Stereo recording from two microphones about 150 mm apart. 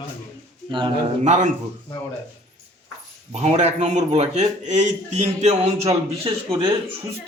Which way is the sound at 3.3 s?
45° right (ahead or behind).